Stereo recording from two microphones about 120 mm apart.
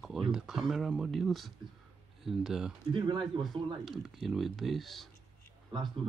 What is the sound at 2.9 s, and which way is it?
Speech, 40° right (ahead or behind).